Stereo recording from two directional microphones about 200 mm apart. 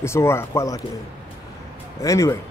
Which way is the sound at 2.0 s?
15° left (ahead or behind).